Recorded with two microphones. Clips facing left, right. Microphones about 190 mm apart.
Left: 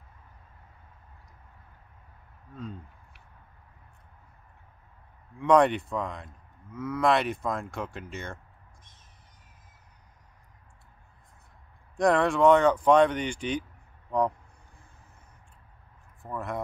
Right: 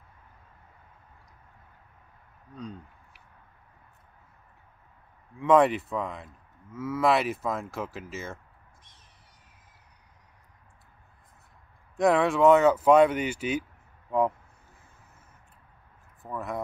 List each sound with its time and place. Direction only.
2.5 s speech: centre (ahead or behind)
5.4 s speech: centre (ahead or behind)
12.0 s speech: centre (ahead or behind)
16.2 s speech: centre (ahead or behind)